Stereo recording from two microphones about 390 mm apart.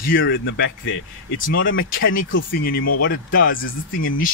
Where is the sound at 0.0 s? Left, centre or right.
Left.